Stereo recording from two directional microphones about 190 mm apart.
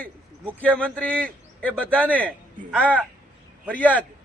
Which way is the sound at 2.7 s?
5° right (ahead or behind).